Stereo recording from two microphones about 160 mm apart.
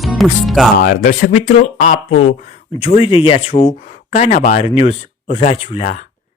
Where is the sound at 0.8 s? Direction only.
55° left (ahead or behind); by 3.8 s 35° left (ahead or behind).